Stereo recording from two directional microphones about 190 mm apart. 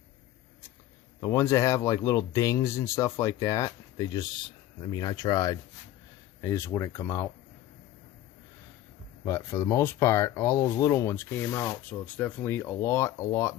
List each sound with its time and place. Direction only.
1.2 s speech: 15° left (ahead or behind)
9.2 s speech: 15° left (ahead or behind)